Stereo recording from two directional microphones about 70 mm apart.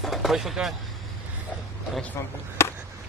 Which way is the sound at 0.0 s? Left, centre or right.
Centre.